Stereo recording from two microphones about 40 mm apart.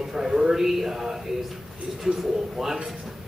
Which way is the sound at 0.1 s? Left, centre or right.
Centre.